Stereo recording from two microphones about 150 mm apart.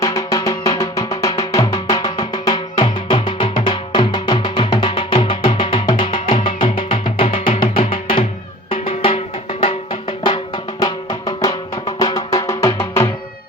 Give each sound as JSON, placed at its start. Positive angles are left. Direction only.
{"t": 0.0, "sound": "music", "side_deg": 20}